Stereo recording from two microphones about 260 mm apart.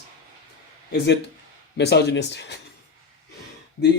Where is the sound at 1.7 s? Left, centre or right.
Left.